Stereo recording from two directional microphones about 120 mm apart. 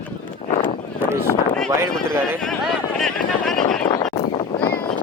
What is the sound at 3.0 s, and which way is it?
Speech, 5° left (ahead or behind).